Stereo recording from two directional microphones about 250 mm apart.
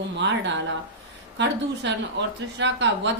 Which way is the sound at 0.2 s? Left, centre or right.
Right.